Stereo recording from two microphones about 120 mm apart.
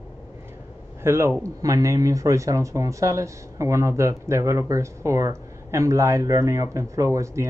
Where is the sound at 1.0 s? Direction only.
20° right (ahead or behind).